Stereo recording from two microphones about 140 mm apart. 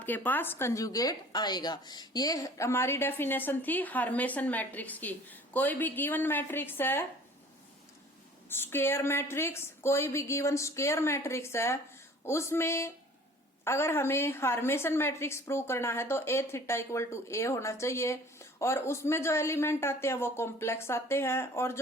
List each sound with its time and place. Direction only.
0.0 s a woman's voice: 10° left (ahead or behind)
8.4 s a woman's voice: 15° left (ahead or behind)